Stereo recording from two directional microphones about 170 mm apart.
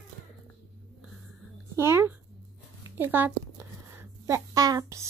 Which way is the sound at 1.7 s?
15° right (ahead or behind).